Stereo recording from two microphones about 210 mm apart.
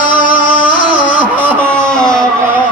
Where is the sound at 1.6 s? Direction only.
5° left (ahead or behind).